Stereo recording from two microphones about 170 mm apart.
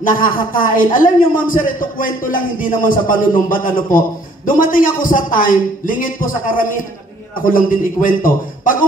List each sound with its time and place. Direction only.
0.2 s a man's voice: 55° left (ahead or behind)